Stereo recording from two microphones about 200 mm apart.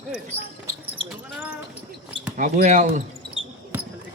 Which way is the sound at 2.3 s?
40° right (ahead or behind).